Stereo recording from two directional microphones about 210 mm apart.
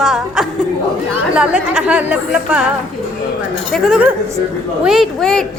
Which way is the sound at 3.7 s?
5° right (ahead or behind).